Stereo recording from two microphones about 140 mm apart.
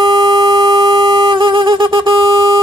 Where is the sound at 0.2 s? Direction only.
25° right (ahead or behind).